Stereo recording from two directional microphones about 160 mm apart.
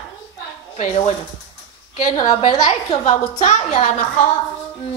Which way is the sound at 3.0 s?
45° left (ahead or behind).